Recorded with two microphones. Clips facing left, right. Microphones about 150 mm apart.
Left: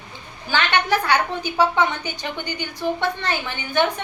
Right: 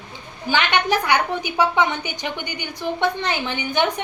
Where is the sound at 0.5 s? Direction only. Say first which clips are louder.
Right 1 dB; 15° right (ahead or behind).